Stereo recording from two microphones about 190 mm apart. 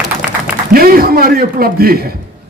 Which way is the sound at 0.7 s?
50° right (ahead or behind).